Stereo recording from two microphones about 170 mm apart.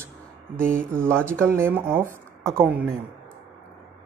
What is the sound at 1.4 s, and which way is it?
Speech, 15° right (ahead or behind).